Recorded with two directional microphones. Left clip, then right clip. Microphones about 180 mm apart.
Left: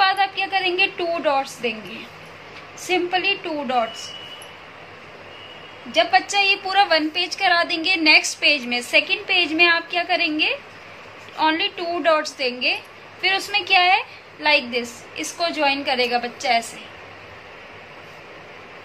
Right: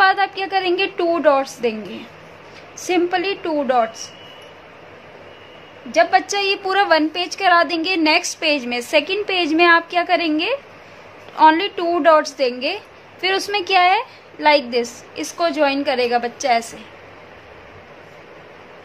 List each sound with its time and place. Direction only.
0.0 s a woman's voice: 60° right (ahead or behind)
2.9 s a woman's voice: 60° right (ahead or behind)
5.9 s a woman's voice: 60° right (ahead or behind)